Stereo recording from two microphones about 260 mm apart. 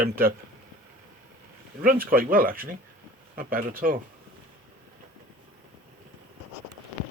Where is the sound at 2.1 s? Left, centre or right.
Right.